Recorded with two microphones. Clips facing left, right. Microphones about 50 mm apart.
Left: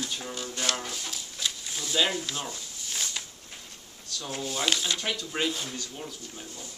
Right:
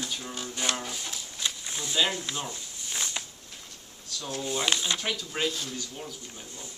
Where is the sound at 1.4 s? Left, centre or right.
Right.